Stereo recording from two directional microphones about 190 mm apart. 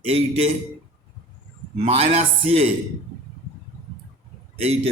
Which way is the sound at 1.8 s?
30° right (ahead or behind).